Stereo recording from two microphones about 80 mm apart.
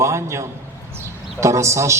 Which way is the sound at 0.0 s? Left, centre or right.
Right.